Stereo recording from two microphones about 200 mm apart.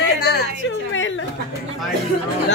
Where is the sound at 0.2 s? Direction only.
55° left (ahead or behind).